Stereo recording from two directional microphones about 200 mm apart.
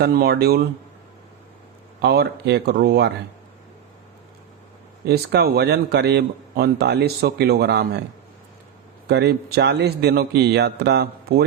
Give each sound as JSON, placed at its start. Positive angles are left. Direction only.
{"t": 0.0, "sound": "speech", "side_deg": -50}
{"t": 2.0, "sound": "a man's voice", "side_deg": -55}
{"t": 5.0, "sound": "speech", "side_deg": -55}
{"t": 9.0, "sound": "a man's voice", "side_deg": -55}